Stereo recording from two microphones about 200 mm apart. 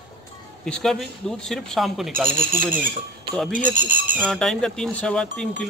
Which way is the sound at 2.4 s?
10° right (ahead or behind).